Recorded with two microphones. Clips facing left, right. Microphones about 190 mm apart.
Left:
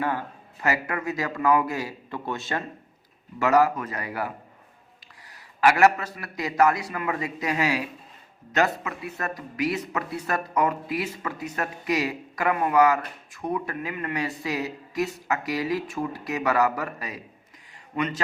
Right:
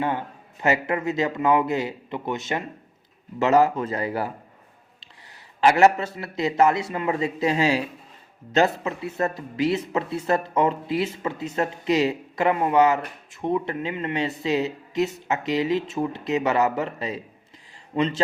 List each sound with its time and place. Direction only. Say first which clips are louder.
0.0 s speech: right 2 dB; 25° right (ahead or behind)
5.5 s speech: right 2 dB; 25° right (ahead or behind)